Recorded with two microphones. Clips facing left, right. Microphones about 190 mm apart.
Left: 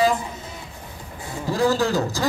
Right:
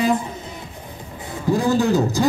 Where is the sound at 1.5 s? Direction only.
20° right (ahead or behind).